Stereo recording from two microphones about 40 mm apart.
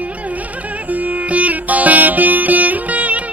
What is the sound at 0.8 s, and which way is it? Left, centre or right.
Music, right.